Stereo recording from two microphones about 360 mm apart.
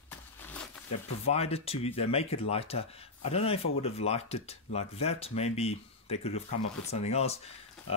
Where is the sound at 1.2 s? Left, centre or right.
Centre.